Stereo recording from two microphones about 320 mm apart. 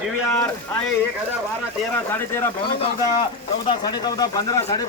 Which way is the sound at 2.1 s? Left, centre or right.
Centre.